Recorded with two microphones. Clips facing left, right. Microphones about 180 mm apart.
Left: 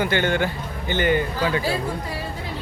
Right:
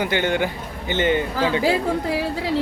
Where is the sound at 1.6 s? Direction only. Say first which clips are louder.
Right 5 dB; 85° right.